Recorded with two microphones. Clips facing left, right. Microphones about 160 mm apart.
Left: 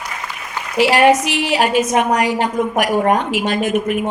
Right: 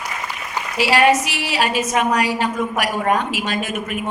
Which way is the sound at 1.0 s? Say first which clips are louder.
Left 4 dB; 15° left (ahead or behind).